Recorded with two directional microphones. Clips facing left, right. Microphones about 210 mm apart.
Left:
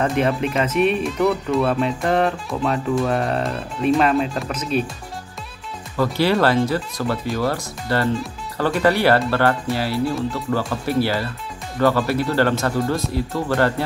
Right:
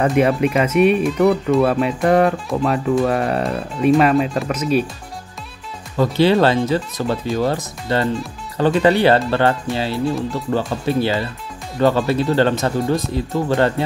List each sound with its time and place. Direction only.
0.0 s speech: centre (ahead or behind)
5.9 s speech: 20° right (ahead or behind)